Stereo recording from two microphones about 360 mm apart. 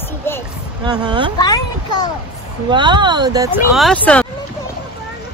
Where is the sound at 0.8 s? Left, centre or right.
Centre.